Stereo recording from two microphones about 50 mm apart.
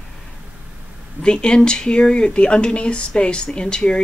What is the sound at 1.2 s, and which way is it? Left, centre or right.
Speech, centre.